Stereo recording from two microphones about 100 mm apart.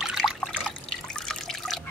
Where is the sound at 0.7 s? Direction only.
5° left (ahead or behind).